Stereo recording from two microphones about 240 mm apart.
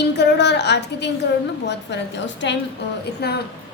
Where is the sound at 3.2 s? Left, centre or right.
Left.